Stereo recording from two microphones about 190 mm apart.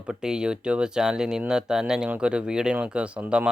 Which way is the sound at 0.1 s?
5° right (ahead or behind).